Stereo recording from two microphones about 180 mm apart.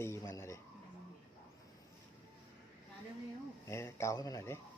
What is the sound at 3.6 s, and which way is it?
Speech, 15° left (ahead or behind).